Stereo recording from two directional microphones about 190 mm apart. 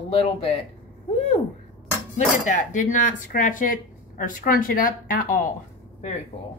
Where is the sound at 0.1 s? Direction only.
30° left (ahead or behind).